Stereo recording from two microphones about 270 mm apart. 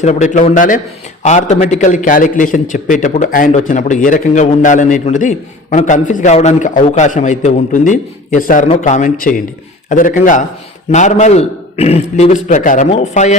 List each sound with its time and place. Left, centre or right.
0.0 s a man's voice: left